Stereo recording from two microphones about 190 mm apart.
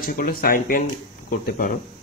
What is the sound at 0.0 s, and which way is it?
Speech, 50° left (ahead or behind).